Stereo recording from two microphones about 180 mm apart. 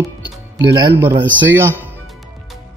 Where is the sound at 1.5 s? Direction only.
10° right (ahead or behind).